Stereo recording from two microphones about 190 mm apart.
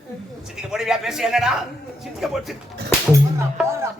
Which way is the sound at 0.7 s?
Centre (ahead or behind).